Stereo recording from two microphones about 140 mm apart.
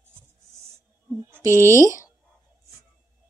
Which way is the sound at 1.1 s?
15° right (ahead or behind).